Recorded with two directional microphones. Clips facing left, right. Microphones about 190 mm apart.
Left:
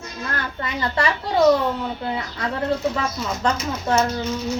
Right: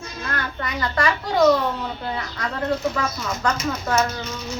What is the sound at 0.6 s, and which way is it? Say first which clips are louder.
Speech: even; 25° left (ahead or behind).